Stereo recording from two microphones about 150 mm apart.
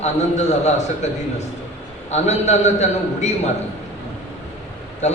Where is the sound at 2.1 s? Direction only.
50° left (ahead or behind).